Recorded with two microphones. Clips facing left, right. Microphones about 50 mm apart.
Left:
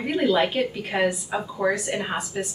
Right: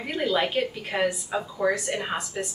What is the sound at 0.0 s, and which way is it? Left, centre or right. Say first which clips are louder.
A woman's voice: left 4 dB; centre.